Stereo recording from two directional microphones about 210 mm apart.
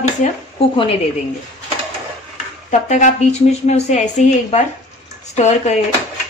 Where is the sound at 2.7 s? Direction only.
35° left (ahead or behind).